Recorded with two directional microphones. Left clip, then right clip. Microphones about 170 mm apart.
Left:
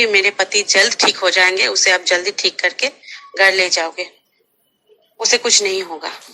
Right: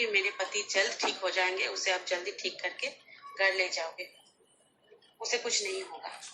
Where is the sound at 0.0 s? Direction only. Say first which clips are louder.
Left 16 dB; 60° left (ahead or behind).